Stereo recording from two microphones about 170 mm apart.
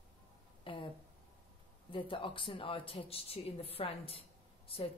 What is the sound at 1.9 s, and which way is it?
Speech, 30° left (ahead or behind).